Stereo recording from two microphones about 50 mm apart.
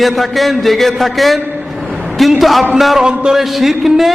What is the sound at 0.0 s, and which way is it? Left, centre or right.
Speech, centre.